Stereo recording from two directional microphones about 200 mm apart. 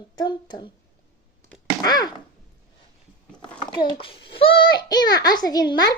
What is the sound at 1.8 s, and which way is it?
Speech, 20° left (ahead or behind).